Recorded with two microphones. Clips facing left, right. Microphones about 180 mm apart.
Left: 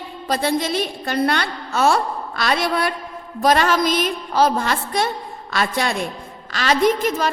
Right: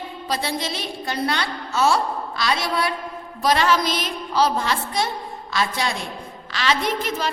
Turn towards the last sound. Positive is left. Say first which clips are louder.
# left 6 dB
turn(degrees=45)  # may be behind; listen again after turning